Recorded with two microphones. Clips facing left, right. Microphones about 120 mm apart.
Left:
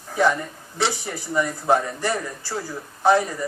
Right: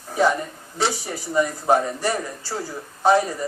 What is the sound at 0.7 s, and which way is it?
Speech, 15° right (ahead or behind).